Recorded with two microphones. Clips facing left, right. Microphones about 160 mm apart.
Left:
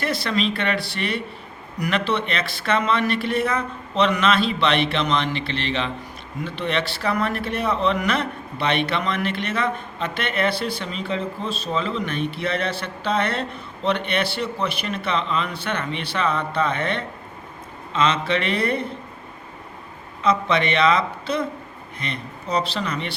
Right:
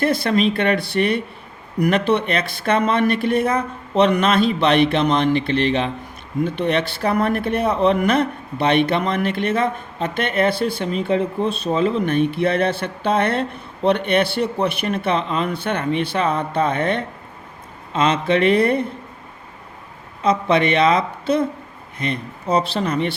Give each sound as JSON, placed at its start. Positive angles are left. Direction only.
{"t": 0.0, "sound": "a man's voice", "side_deg": -50}
{"t": 20.2, "sound": "a man's voice", "side_deg": -50}